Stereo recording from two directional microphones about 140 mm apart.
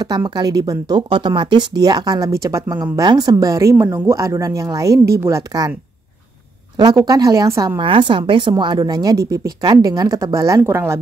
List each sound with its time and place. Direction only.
0.0 s speech: 30° right (ahead or behind)
6.8 s speech: 25° right (ahead or behind)
7.8 s speech: 40° right (ahead or behind); by 11.0 s 20° right (ahead or behind)